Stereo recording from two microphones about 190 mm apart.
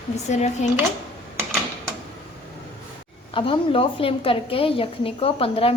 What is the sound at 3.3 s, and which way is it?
A woman's voice, 30° left (ahead or behind).